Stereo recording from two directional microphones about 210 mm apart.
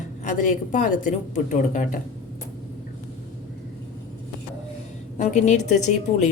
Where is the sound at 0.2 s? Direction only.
35° left (ahead or behind).